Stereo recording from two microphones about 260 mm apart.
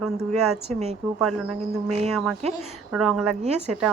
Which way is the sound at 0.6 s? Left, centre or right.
Right.